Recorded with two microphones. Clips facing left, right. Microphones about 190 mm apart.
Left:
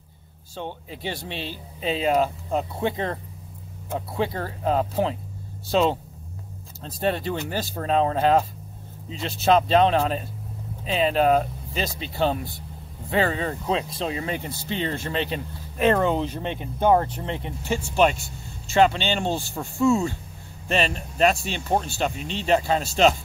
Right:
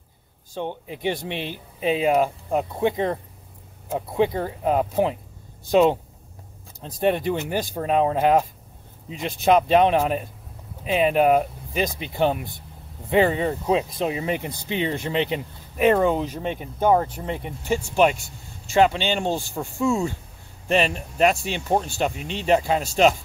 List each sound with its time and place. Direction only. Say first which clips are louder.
0.6 s speech: right 4 dB; 15° right (ahead or behind)